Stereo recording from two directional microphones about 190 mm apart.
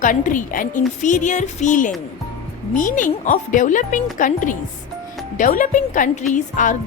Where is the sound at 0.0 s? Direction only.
45° left (ahead or behind).